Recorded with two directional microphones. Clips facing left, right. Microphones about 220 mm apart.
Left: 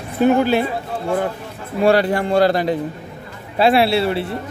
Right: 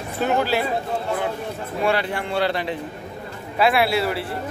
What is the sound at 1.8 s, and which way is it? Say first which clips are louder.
Speech: left 8 dB; 40° left (ahead or behind).